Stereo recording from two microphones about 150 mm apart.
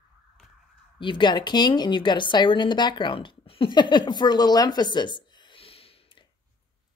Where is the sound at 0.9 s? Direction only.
30° left (ahead or behind).